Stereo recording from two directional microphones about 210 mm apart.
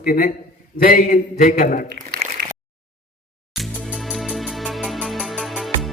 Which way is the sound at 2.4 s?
45° right (ahead or behind).